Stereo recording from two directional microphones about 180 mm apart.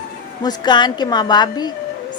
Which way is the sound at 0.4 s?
25° left (ahead or behind).